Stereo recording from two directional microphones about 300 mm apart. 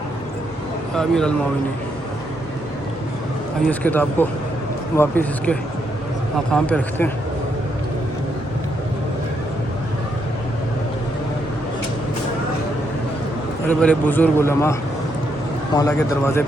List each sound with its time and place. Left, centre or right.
0.9 s speech: centre
3.7 s a man's voice: centre
13.7 s a man's voice: centre